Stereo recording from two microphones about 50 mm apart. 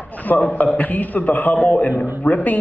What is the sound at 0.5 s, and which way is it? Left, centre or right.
Speech, left.